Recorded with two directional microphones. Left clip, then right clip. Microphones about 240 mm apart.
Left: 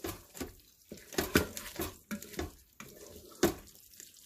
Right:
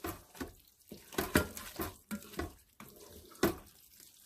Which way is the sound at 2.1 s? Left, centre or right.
Centre.